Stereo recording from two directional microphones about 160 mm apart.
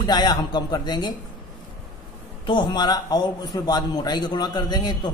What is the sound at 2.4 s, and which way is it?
A man's voice, 30° left (ahead or behind).